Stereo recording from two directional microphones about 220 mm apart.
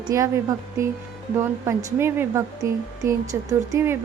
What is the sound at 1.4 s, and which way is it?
A woman's voice, 10° right (ahead or behind).